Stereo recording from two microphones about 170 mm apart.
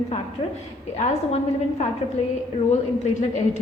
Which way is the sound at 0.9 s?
40° left (ahead or behind).